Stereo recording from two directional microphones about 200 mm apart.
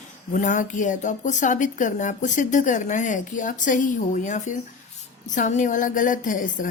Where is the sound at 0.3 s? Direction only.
40° left (ahead or behind).